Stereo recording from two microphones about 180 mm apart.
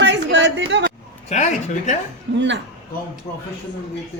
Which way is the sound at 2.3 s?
90° right.